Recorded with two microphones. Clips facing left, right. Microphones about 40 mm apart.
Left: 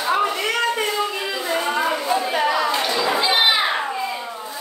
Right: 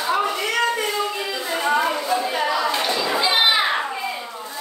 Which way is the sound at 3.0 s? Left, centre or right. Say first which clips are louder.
Left 1 dB; centre.